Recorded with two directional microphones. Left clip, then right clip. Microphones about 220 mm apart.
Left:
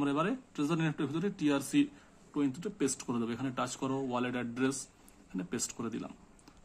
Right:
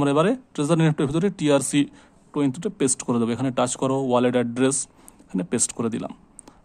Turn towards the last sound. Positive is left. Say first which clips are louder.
# right 12 dB
turn(degrees=-50)  # may be behind; listen again after turning